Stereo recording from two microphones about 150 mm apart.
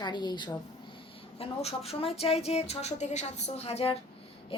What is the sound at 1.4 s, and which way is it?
Speech, 45° left (ahead or behind).